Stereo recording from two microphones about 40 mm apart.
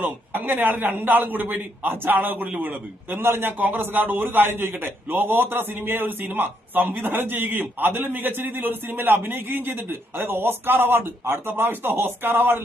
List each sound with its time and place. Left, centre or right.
0.0 s a man's voice: right
3.2 s a man's voice: right
3.8 s a man's voice: right